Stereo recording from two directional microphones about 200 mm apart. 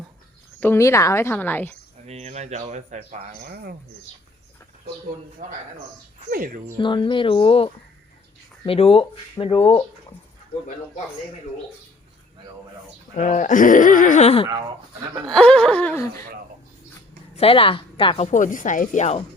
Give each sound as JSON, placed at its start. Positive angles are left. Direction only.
{"t": 0.6, "sound": "a woman's voice", "side_deg": 15}
{"t": 2.0, "sound": "speech", "side_deg": -35}
{"t": 3.4, "sound": "speech", "side_deg": -50}
{"t": 5.4, "sound": "speech", "side_deg": -40}
{"t": 6.7, "sound": "speech", "side_deg": 25}
{"t": 13.1, "sound": "speech", "side_deg": 40}
{"t": 15.2, "sound": "whimper", "side_deg": 5}
{"t": 17.3, "sound": "speech", "side_deg": 30}